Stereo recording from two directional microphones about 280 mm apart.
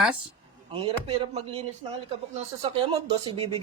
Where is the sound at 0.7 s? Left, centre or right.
Centre.